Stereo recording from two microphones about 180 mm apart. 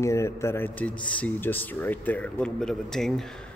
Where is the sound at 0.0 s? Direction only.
15° left (ahead or behind).